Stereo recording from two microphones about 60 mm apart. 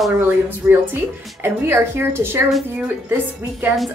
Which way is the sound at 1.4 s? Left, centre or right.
Right.